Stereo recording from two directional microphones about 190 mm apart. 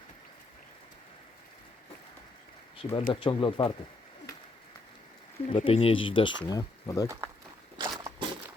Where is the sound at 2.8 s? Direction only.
25° left (ahead or behind).